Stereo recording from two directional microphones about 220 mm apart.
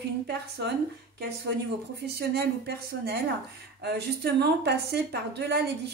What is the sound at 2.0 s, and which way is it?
Speech, 45° right (ahead or behind).